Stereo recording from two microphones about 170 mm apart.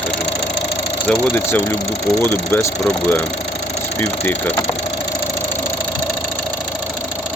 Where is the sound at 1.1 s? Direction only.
10° left (ahead or behind).